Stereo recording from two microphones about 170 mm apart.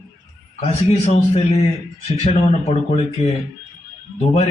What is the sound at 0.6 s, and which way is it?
Speech, 35° left (ahead or behind).